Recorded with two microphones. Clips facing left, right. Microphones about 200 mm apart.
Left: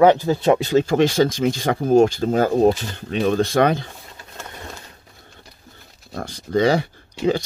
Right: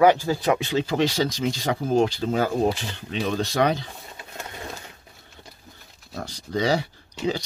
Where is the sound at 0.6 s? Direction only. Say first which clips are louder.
Left 6 dB; 45° left (ahead or behind).